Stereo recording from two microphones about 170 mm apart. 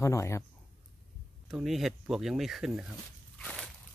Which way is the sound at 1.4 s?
Centre (ahead or behind).